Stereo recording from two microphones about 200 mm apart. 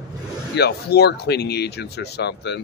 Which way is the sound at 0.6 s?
55° left (ahead or behind).